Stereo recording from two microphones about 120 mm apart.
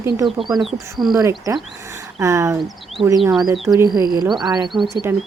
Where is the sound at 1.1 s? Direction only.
30° right (ahead or behind).